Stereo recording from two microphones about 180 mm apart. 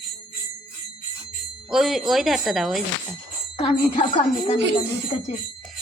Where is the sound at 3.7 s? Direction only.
30° left (ahead or behind).